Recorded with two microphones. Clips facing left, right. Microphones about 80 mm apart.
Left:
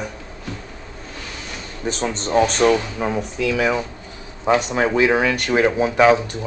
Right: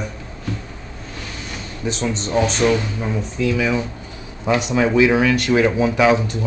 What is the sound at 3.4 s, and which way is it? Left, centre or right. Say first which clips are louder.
Speech: right 1 dB; left.